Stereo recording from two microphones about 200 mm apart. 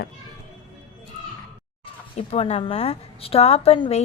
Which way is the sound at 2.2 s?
30° left (ahead or behind).